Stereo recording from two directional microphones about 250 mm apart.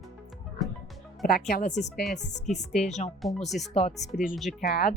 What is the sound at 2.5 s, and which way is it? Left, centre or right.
Speech, centre.